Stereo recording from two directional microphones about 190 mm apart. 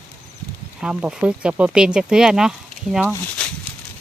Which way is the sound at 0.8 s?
5° right (ahead or behind).